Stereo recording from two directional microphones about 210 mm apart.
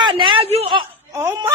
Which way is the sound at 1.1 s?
15° right (ahead or behind).